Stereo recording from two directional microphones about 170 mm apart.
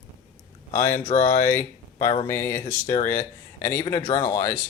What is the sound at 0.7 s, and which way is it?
Speech, 45° left (ahead or behind).